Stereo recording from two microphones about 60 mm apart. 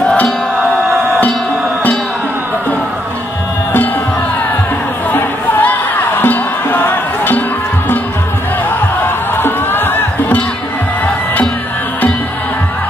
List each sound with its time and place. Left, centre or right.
0.0 s music: centre
5.1 s music: left
9.4 s music: left